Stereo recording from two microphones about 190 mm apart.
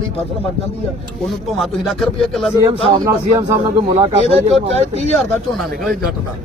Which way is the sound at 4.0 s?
30° right (ahead or behind).